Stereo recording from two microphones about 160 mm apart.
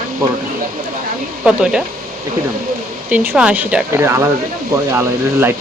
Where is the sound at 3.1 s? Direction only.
10° right (ahead or behind).